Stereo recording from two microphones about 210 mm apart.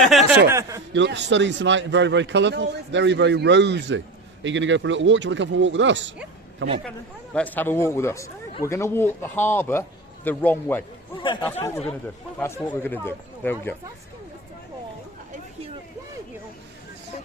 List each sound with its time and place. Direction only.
0.0 s a sound: centre (ahead or behind)
0.4 s a man's voice: 15° right (ahead or behind)
0.9 s a man's voice: 55° right (ahead or behind)
7.3 s speech: 10° left (ahead or behind)
11.2 s speech: 20° left (ahead or behind)